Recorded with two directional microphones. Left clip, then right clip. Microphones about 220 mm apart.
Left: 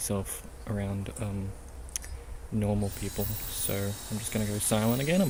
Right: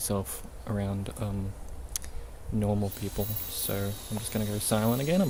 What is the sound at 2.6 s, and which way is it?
Speech, 5° right (ahead or behind).